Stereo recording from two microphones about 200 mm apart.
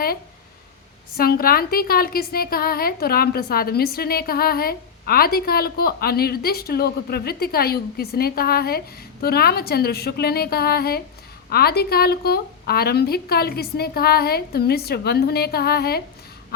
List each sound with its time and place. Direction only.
1.1 s a woman's voice: 50° left (ahead or behind)